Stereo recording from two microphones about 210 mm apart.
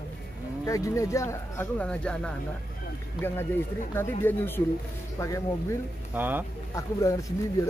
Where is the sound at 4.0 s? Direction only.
10° left (ahead or behind).